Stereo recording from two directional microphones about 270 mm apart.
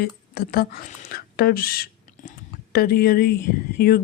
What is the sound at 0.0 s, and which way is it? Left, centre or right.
Speech, left.